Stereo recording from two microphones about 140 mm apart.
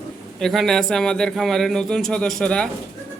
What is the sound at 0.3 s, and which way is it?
A man's voice, centre (ahead or behind).